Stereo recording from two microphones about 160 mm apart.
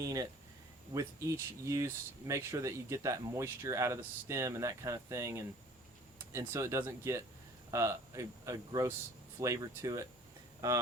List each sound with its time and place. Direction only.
0.0 s speech: 20° right (ahead or behind)